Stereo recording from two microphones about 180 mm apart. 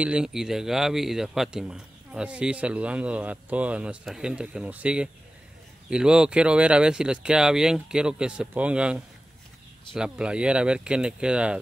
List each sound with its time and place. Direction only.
0.0 s speech: 5° right (ahead or behind)